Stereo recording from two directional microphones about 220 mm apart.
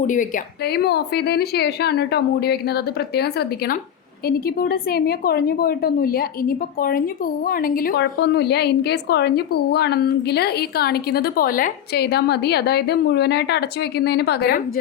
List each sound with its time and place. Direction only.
0.1 s a woman's voice: 35° left (ahead or behind)